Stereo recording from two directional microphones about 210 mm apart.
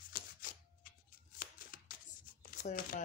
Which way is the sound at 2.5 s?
40° left (ahead or behind).